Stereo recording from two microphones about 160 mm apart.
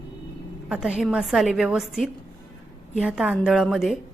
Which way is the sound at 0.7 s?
5° right (ahead or behind).